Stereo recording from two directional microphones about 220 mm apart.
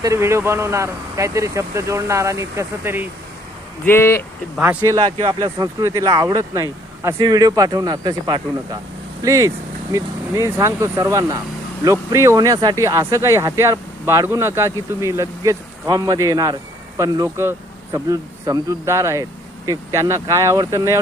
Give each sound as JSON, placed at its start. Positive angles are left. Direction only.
{"t": 0.0, "sound": "speech", "side_deg": -15}
{"t": 3.8, "sound": "speech", "side_deg": 10}
{"t": 4.5, "sound": "speech", "side_deg": -10}